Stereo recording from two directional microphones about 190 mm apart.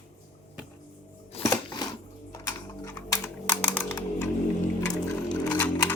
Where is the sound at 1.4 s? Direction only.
20° left (ahead or behind).